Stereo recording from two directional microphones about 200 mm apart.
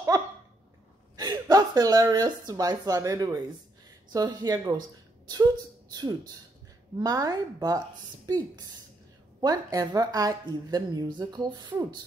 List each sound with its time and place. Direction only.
1.1 s a woman's voice: 20° right (ahead or behind)
9.4 s a woman's voice: 20° right (ahead or behind)